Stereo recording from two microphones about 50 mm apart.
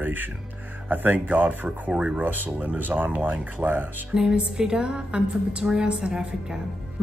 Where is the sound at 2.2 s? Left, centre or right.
Right.